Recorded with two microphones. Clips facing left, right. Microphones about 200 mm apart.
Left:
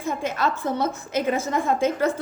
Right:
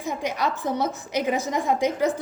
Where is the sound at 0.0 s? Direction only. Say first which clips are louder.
Left 1 dB; 15° right (ahead or behind).